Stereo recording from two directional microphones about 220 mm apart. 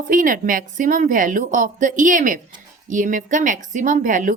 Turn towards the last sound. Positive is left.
turn(degrees=-35)  # may be behind; listen again after turning